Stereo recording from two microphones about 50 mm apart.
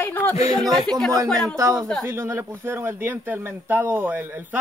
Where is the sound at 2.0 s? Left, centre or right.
Right.